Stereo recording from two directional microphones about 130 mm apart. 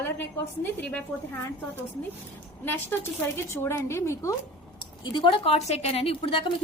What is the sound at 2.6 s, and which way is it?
A woman's voice, 15° left (ahead or behind).